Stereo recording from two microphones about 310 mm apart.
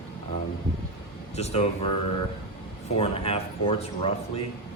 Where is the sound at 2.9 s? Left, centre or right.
Centre.